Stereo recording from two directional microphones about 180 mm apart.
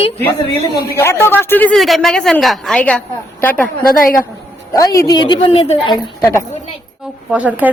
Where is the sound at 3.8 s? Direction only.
50° left (ahead or behind).